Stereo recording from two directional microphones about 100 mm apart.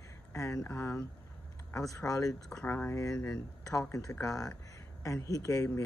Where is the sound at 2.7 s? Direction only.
25° left (ahead or behind).